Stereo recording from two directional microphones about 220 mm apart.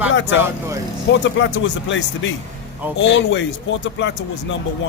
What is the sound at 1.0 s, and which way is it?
Speech, 55° left (ahead or behind).